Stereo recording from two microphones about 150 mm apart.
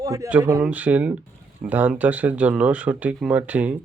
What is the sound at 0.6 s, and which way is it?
Speech, 10° right (ahead or behind).